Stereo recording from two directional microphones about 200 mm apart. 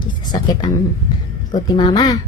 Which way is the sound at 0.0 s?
20° left (ahead or behind).